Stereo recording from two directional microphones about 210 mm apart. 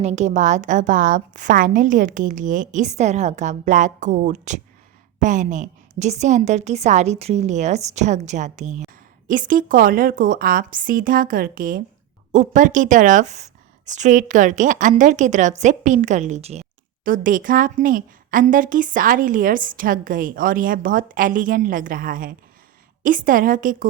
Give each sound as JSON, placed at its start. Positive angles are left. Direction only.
{"t": 0.0, "sound": "a woman's voice", "side_deg": -35}